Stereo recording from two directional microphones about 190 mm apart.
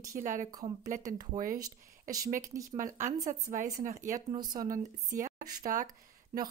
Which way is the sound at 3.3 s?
40° right (ahead or behind).